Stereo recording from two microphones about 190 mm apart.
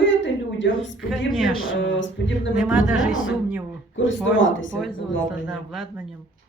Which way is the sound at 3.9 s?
80° left.